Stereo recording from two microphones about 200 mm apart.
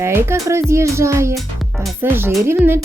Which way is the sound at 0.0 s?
10° right (ahead or behind).